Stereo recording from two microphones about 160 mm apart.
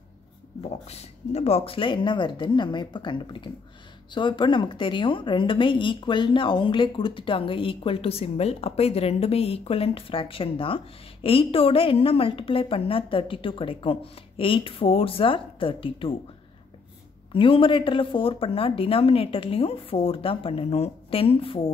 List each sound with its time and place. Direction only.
0.6 s a woman's voice: 40° left (ahead or behind)
17.3 s a woman's voice: 35° left (ahead or behind)